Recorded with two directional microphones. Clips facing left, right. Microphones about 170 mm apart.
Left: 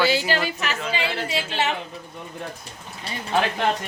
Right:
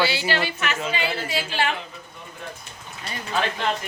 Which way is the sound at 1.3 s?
25° left (ahead or behind).